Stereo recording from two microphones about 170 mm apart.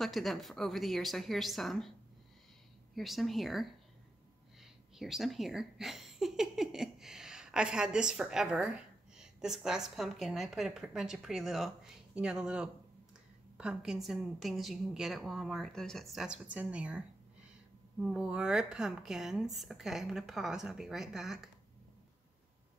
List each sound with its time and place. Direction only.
0.0 s speech: centre (ahead or behind)
4.9 s speech: centre (ahead or behind)
18.0 s speech: 5° right (ahead or behind)